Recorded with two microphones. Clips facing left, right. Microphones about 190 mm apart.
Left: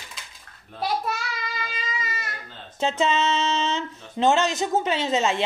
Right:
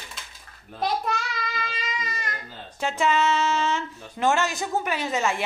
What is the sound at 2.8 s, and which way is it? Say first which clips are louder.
Speech: left 1 dB; 20° left (ahead or behind).